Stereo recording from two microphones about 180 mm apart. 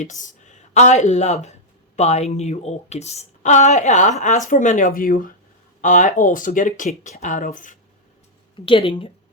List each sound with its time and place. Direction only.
0.0 s a woman's voice: 45° left (ahead or behind)
8.6 s speech: 30° left (ahead or behind)